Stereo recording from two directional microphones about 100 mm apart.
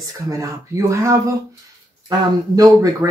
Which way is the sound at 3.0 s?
20° right (ahead or behind).